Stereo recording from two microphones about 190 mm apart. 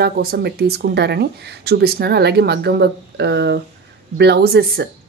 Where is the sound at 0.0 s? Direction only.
55° right (ahead or behind).